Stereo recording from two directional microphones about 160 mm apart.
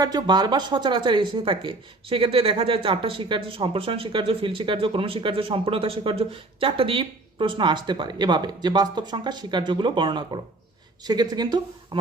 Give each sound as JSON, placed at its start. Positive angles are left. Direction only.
{"t": 0.0, "sound": "speech", "side_deg": -25}